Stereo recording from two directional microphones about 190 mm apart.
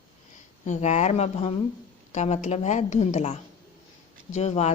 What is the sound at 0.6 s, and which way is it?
A woman's voice, 40° left (ahead or behind).